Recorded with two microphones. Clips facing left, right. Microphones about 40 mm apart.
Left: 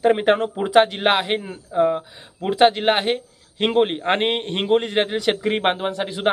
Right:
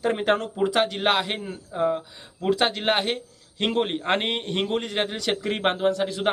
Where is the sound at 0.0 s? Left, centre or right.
Left.